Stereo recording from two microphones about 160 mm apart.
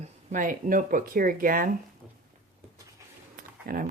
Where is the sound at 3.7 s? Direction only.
65° right (ahead or behind).